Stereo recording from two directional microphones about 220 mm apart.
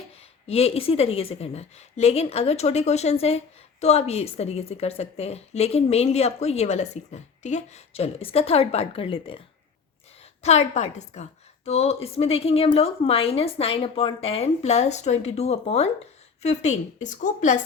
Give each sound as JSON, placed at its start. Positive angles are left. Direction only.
{"t": 0.4, "sound": "a woman's voice", "side_deg": 25}
{"t": 10.4, "sound": "a woman's voice", "side_deg": 30}